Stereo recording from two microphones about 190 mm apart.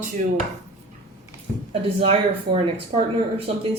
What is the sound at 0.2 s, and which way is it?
Speech, 45° right (ahead or behind).